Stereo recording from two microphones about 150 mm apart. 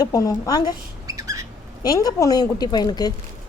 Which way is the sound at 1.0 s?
20° right (ahead or behind).